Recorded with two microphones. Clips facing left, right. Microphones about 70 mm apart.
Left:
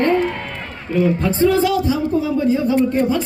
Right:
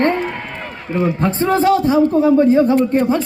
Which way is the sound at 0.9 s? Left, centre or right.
Right.